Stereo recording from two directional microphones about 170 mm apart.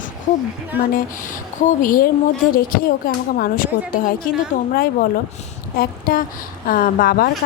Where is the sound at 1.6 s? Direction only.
55° left (ahead or behind).